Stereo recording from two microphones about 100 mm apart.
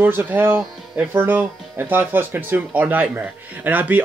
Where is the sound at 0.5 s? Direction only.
10° right (ahead or behind).